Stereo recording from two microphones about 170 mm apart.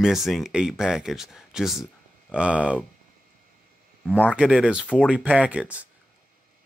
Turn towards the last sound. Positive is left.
turn(degrees=-10)  # may be behind; listen again after turning